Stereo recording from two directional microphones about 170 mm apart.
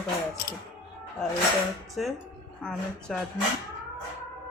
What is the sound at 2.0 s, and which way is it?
Speech, centre (ahead or behind).